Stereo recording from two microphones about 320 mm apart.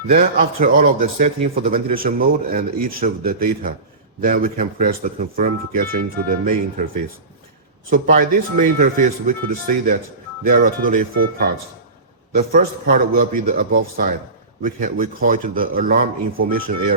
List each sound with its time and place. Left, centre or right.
0.1 s speech: right
12.3 s speech: right